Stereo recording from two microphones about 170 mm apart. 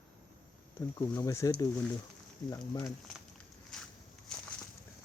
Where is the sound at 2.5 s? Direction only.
20° left (ahead or behind).